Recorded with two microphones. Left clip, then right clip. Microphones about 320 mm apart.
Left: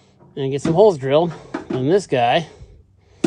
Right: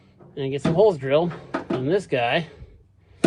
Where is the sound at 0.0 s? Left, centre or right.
Left.